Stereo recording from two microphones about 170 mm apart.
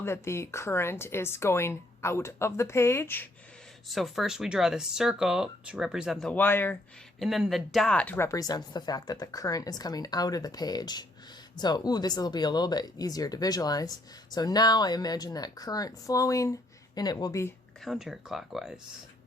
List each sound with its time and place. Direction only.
0.0 s speech: 15° left (ahead or behind)
3.8 s speech: centre (ahead or behind)
7.2 s speech: centre (ahead or behind); by 17.5 s 20° left (ahead or behind)
17.8 s speech: centre (ahead or behind)